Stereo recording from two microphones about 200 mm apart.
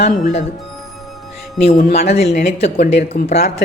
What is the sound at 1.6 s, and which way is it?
Speech, 40° left (ahead or behind).